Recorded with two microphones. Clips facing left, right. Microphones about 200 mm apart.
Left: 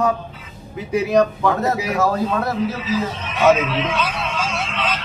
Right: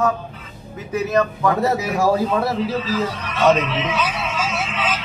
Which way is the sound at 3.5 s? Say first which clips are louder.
Left 1 dB; 5° left (ahead or behind).